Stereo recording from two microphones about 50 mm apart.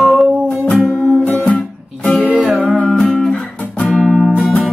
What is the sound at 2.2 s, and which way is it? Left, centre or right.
Music, centre.